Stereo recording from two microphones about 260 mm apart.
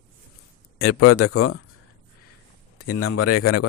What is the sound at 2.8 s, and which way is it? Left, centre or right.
Speech, left.